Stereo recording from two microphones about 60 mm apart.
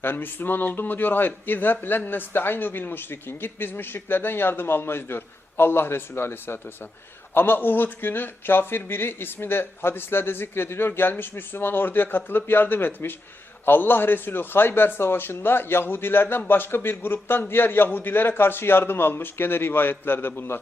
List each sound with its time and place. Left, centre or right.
0.0 s a man's voice: left